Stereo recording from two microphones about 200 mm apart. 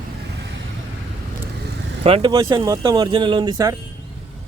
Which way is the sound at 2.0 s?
25° right (ahead or behind).